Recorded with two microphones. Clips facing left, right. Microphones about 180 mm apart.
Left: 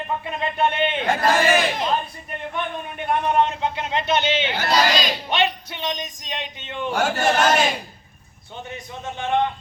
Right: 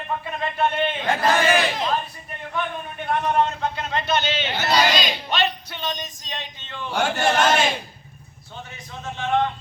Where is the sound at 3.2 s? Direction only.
15° left (ahead or behind).